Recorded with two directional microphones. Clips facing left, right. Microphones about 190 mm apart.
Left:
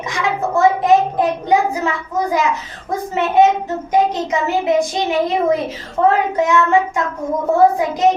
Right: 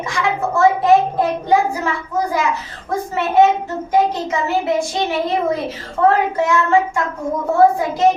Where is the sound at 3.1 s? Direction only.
20° left (ahead or behind).